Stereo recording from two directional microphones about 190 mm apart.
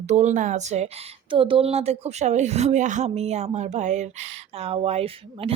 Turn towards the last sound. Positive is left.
turn(degrees=-30)  # may be behind; listen again after turning